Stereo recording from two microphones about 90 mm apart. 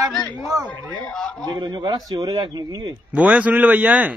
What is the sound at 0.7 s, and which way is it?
Speech, 15° left (ahead or behind).